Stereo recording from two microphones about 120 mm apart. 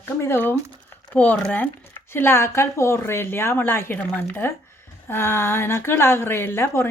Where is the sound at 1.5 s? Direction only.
15° left (ahead or behind).